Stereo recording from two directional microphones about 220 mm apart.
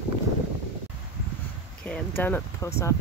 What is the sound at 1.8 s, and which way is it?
Speech, 5° left (ahead or behind).